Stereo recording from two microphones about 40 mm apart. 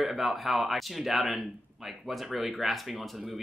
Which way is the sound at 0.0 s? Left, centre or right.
Centre.